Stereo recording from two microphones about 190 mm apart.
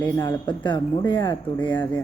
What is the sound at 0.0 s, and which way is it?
Speech, 20° left (ahead or behind).